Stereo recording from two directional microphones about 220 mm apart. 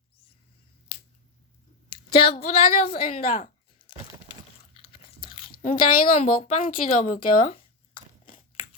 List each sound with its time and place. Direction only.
1.9 s a woman's voice: 25° left (ahead or behind)
3.3 s a sound: 25° left (ahead or behind)
4.8 s biting: 25° left (ahead or behind)
5.7 s a woman's voice: 40° left (ahead or behind)
8.3 s crunch: 40° left (ahead or behind)